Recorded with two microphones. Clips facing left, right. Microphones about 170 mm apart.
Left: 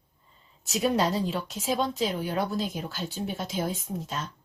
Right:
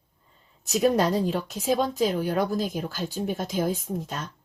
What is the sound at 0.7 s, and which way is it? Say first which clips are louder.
Speech: right 4 dB; 45° right (ahead or behind).